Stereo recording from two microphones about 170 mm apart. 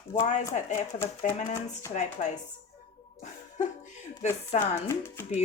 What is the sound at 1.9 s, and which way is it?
Speech, 45° left (ahead or behind).